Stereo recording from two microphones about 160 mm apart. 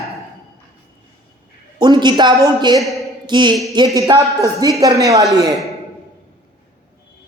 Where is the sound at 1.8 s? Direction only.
25° right (ahead or behind).